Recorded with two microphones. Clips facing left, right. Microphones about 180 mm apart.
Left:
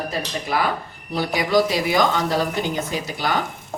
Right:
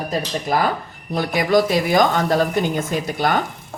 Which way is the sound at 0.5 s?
45° right (ahead or behind).